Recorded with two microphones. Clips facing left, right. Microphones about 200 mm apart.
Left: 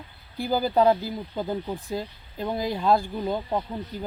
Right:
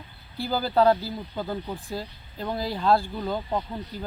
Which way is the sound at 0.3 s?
15° left (ahead or behind).